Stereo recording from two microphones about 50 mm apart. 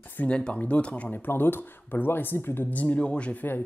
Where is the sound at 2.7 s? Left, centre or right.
Left.